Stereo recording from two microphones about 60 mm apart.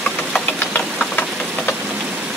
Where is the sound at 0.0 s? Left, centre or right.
Centre.